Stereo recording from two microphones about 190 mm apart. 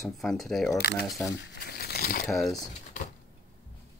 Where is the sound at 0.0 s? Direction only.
Centre (ahead or behind).